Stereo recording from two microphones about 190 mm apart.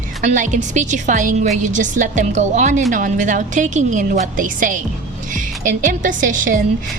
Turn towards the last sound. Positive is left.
turn(degrees=-45)  # may be behind; listen again after turning